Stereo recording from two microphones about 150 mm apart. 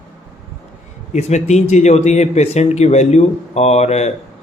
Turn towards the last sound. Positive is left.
turn(degrees=45)  # may be behind; listen again after turning